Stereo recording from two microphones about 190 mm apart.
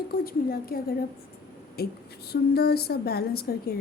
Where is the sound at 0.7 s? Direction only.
50° left (ahead or behind).